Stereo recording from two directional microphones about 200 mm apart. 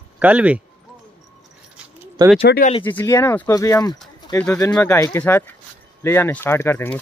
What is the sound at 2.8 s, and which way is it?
Speech, 10° left (ahead or behind).